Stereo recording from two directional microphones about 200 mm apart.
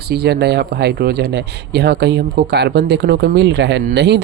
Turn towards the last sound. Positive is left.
turn(degrees=-60)  # may be behind; listen again after turning